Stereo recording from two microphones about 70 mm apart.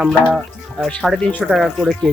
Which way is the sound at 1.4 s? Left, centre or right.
Centre.